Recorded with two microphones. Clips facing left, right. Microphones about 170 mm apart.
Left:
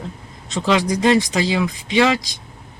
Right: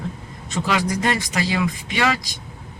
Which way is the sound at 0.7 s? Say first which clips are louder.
Left 6 dB; 25° left (ahead or behind).